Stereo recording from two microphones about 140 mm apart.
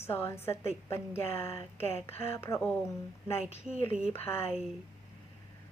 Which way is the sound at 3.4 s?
50° left (ahead or behind).